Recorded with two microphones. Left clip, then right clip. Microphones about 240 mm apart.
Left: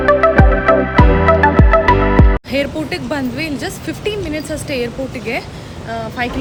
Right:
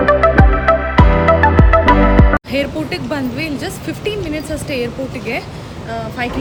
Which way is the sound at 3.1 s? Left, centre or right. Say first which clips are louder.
Even; left.